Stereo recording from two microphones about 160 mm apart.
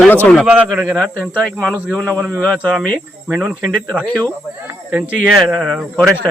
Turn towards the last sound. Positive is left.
turn(degrees=0)  # may be behind; listen again after turning